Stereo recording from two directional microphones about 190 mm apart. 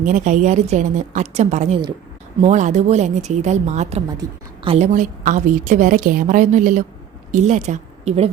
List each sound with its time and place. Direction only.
0.0 s a woman's voice: 40° right (ahead or behind)